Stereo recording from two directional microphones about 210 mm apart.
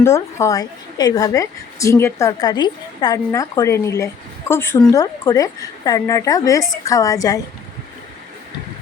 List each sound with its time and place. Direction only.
0.0 s a woman's voice: 15° left (ahead or behind)